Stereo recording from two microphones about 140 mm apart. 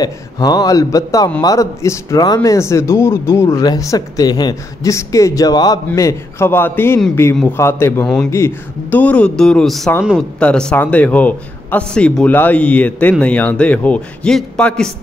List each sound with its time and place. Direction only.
0.0 s a man's voice: 30° left (ahead or behind)
8.0 s a man's voice: 5° left (ahead or behind)
8.3 s a man's voice: 20° left (ahead or behind)